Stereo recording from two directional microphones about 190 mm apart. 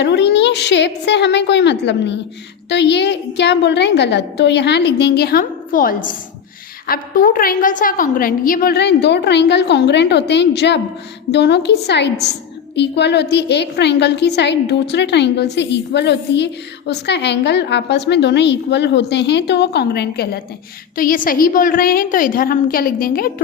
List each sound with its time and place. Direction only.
0.0 s a woman's voice: 65° left (ahead or behind)